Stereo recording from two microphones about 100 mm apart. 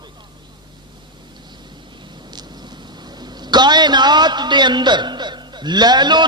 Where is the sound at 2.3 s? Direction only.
45° right (ahead or behind).